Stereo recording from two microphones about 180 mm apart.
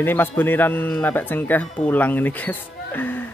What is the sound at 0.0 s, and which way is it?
Speech, 10° left (ahead or behind).